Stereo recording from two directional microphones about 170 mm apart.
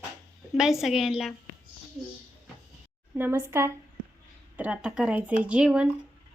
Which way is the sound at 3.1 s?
10° right (ahead or behind).